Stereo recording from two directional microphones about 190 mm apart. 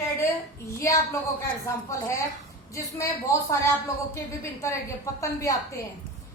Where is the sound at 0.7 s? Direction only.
15° left (ahead or behind).